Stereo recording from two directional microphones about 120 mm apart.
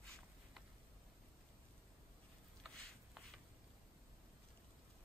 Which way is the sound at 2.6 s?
Centre (ahead or behind).